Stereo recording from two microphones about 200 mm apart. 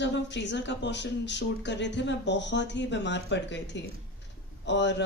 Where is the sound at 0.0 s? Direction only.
60° left (ahead or behind).